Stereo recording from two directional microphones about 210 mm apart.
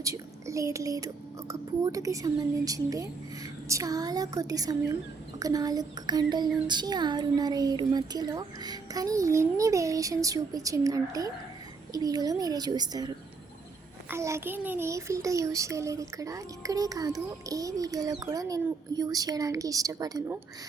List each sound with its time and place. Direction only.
0.0 s a child's voice: 15° right (ahead or behind)